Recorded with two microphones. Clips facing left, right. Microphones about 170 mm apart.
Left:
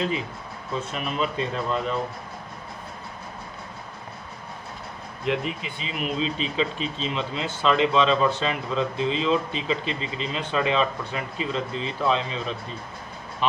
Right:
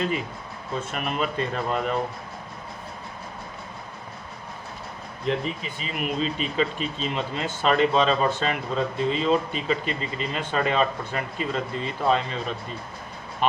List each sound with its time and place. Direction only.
0.9 s speech: 55° right (ahead or behind)
5.2 s speech: 40° right (ahead or behind)